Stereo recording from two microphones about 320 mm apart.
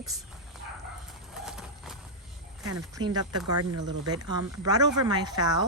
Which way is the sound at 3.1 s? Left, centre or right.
Right.